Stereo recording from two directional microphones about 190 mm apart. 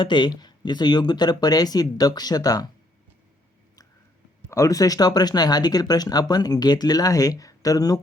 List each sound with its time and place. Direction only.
0.0 s speech: 25° left (ahead or behind)
4.4 s speech: 15° left (ahead or behind)